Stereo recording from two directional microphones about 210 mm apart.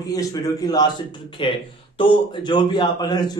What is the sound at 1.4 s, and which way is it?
A man's voice, 25° left (ahead or behind).